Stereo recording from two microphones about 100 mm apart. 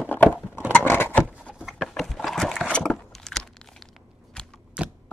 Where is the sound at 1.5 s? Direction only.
5° right (ahead or behind).